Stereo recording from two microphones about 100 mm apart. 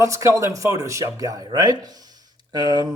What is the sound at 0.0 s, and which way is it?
Speech, 30° right (ahead or behind).